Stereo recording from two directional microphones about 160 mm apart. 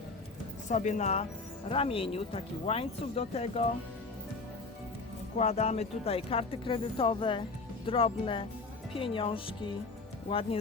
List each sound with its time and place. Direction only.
0.7 s speech: 50° left (ahead or behind)
5.4 s speech: 45° left (ahead or behind)